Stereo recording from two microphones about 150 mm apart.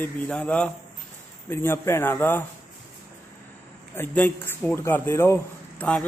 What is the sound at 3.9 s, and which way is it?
A man's voice, 15° left (ahead or behind).